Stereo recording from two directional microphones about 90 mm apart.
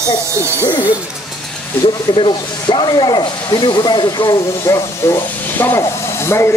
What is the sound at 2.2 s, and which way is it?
Speech, 60° left (ahead or behind).